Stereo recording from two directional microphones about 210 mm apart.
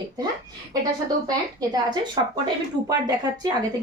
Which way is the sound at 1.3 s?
20° right (ahead or behind).